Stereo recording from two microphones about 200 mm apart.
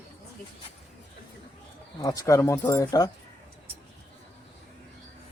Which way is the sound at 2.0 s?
15° left (ahead or behind).